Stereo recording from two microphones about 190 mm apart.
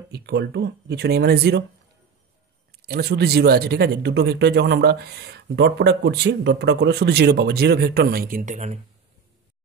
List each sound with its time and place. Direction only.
0.1 s speech: 60° right (ahead or behind)
2.7 s speech: 55° right (ahead or behind); by 8.7 s 40° right (ahead or behind)